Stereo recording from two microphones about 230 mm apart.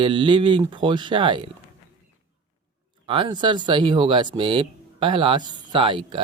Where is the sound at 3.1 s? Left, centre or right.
Right.